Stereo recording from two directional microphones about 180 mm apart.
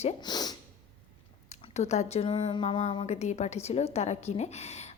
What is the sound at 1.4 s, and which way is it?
A woman's voice, 40° left (ahead or behind).